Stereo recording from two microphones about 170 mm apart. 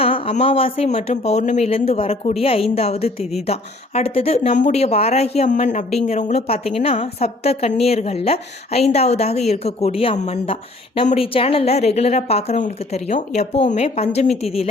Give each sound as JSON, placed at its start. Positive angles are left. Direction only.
{"t": 0.0, "sound": "speech", "side_deg": 35}